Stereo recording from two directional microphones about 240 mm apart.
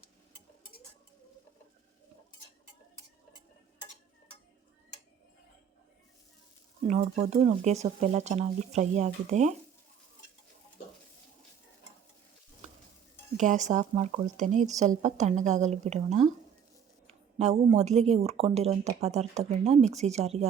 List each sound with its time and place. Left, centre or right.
6.8 s speech: right
13.3 s speech: right